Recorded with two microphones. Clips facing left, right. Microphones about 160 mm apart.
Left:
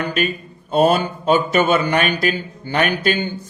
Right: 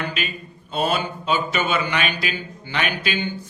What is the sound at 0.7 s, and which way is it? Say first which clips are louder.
Speech: left 8 dB; 45° left (ahead or behind).